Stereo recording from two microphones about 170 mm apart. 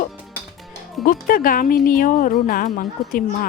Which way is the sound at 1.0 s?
55° left (ahead or behind).